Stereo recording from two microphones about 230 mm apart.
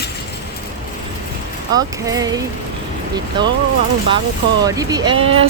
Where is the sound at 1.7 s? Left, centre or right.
Centre.